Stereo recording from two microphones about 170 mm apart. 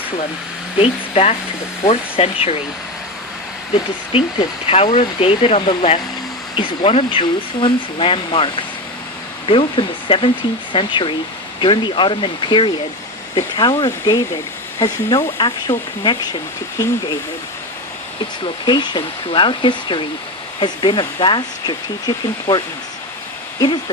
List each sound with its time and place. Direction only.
0.8 s speech: 35° left (ahead or behind)
4.1 s speech: 35° left (ahead or behind)
9.5 s speech: 30° left (ahead or behind)
18.4 s speech: 25° left (ahead or behind)